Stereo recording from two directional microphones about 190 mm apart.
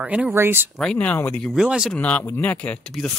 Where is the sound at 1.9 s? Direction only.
10° left (ahead or behind).